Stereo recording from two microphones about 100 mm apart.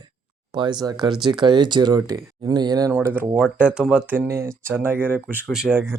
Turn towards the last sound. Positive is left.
turn(degrees=5)  # may be behind; listen again after turning